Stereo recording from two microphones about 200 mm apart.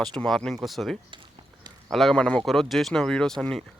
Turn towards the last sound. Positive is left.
turn(degrees=5)  # may be behind; listen again after turning